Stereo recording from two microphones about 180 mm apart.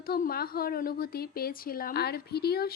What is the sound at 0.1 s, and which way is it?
A woman's voice, 55° left (ahead or behind).